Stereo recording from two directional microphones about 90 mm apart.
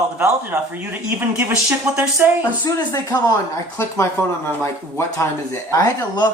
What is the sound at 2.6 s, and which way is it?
Speech, 40° left (ahead or behind).